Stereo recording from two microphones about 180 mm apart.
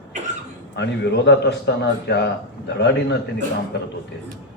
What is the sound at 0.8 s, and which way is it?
A man's voice, 75° left (ahead or behind).